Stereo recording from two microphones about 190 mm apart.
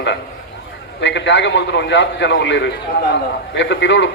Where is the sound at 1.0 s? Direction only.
70° left (ahead or behind).